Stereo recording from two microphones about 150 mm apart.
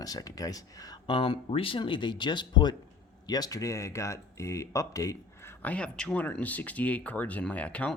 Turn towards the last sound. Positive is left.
turn(degrees=10)  # may be behind; listen again after turning